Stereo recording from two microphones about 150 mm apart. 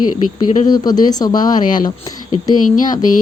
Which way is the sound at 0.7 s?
25° left (ahead or behind).